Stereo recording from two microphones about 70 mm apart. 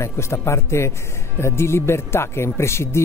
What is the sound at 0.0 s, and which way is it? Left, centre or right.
Speech, left.